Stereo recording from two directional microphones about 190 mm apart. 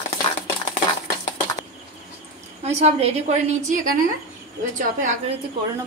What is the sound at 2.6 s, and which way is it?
A woman's voice, 35° right (ahead or behind).